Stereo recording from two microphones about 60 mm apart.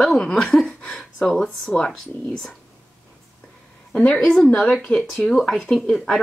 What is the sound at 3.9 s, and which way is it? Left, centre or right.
A woman's voice, centre.